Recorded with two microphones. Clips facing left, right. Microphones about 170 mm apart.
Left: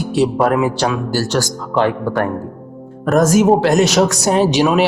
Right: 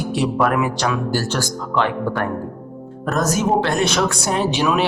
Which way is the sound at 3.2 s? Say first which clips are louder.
Left 6 dB; 90° left.